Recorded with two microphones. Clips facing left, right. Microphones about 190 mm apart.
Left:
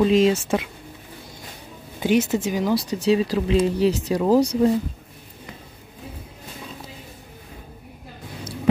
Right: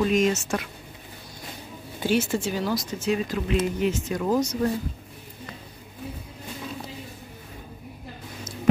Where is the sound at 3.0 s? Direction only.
35° left (ahead or behind).